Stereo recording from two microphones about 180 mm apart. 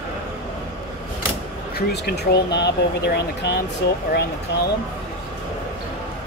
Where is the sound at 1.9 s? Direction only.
65° left (ahead or behind).